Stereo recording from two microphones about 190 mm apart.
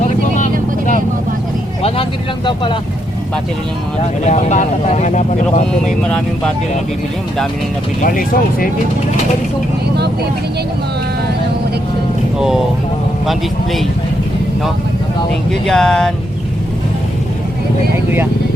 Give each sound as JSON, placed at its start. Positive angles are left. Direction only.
{"t": 1.8, "sound": "speech", "side_deg": 25}
{"t": 4.2, "sound": "speech", "side_deg": 40}
{"t": 5.8, "sound": "speech", "side_deg": 5}
{"t": 8.0, "sound": "speech", "side_deg": 50}
{"t": 12.4, "sound": "speech", "side_deg": 0}
{"t": 15.6, "sound": "speech", "side_deg": 5}